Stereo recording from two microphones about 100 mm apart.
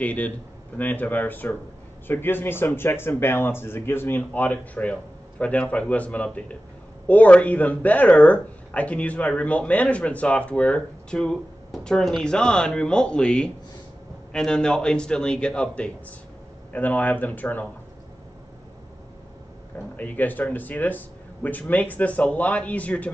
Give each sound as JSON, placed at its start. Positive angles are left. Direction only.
{"t": 0.0, "sound": "speech", "side_deg": 15}
{"t": 20.0, "sound": "speech", "side_deg": 15}